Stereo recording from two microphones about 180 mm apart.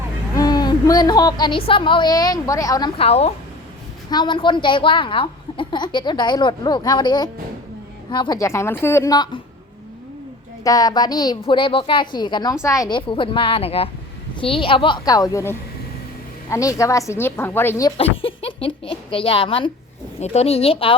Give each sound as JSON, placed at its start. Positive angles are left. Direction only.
{"t": 0.3, "sound": "a woman's voice", "side_deg": 20}
{"t": 3.0, "sound": "a woman's voice", "side_deg": 35}
{"t": 10.6, "sound": "a woman's voice", "side_deg": 20}
{"t": 17.9, "sound": "speech", "side_deg": 30}